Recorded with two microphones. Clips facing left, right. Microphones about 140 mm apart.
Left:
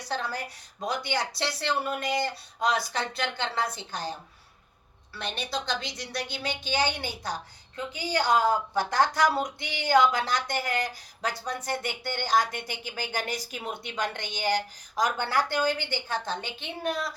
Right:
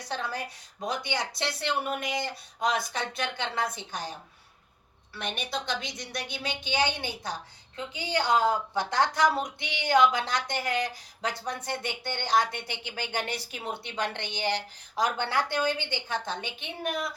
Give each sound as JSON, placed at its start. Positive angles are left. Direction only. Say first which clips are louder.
{"t": 0.1, "sound": "a sound", "louder": "left 1 dB", "side_deg": -25}
{"t": 0.9, "sound": "a woman's voice", "louder": "left 2 dB", "side_deg": -20}
{"t": 5.1, "sound": "a woman's voice", "louder": "left 1 dB", "side_deg": -20}